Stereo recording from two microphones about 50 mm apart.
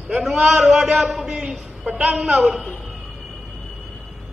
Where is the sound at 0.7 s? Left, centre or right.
Centre.